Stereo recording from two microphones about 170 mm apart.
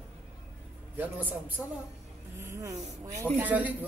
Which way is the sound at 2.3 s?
15° right (ahead or behind).